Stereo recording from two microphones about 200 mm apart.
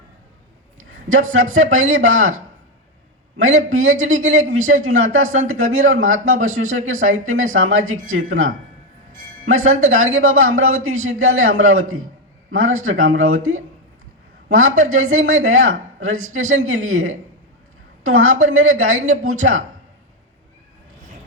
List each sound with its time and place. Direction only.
0.8 s speech: 90° right
3.3 s speech: 90° right
9.5 s speech: 90° right
14.5 s speech: 90° right